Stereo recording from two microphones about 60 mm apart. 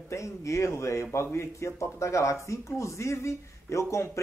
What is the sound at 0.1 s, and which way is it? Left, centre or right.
Speech, left.